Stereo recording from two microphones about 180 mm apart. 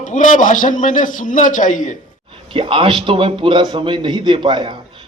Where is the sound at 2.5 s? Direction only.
30° right (ahead or behind).